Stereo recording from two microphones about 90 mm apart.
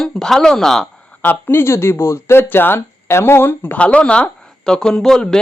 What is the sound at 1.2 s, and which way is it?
Speech, 20° left (ahead or behind).